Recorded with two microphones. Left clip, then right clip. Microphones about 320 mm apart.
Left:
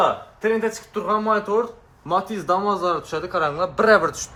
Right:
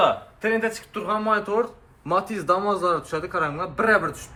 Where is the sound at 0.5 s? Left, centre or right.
Centre.